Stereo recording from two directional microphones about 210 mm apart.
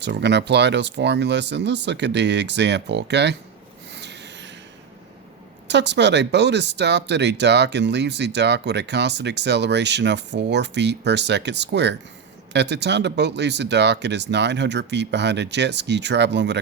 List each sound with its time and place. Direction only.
0.0 s speech: 55° right (ahead or behind)
3.9 s a sound: 55° right (ahead or behind)
5.6 s speech: 55° right (ahead or behind)